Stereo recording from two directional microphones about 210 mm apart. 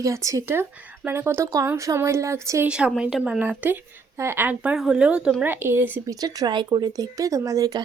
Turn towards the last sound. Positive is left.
turn(degrees=-15)  # may be behind; listen again after turning